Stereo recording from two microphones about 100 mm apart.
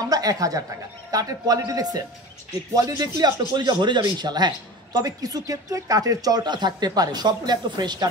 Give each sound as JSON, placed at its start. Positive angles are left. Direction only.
{"t": 0.1, "sound": "speech", "side_deg": -40}
{"t": 3.5, "sound": "a man's voice", "side_deg": -50}